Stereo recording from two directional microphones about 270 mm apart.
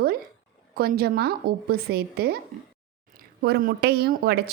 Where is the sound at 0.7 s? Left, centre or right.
Right.